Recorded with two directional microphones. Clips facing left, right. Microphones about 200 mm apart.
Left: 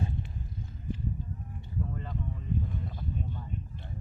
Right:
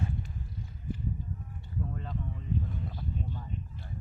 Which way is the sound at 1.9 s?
Centre (ahead or behind).